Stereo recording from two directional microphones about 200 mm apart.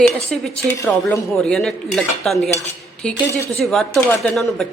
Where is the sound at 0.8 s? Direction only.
15° left (ahead or behind).